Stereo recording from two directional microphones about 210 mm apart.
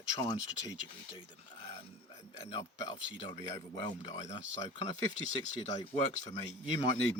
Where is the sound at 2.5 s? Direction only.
20° left (ahead or behind).